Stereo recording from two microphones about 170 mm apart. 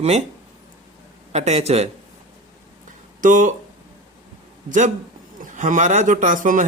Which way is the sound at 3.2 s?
50° right (ahead or behind).